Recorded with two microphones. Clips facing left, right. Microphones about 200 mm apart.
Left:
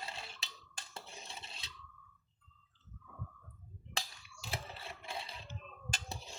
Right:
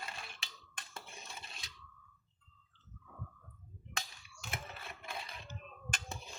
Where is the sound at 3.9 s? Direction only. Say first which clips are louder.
Left 1 dB; 30° left (ahead or behind).